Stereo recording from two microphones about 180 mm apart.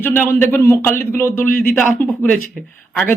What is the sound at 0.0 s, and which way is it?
Speech, 10° left (ahead or behind).